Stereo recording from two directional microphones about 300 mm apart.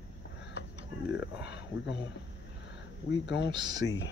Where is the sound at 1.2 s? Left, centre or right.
Left.